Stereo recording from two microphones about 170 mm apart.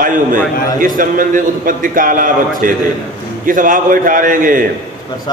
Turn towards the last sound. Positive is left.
turn(degrees=-55)  # may be behind; listen again after turning